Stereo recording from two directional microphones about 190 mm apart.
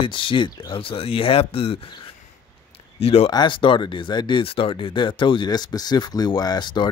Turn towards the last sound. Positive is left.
turn(degrees=25)  # may be behind; listen again after turning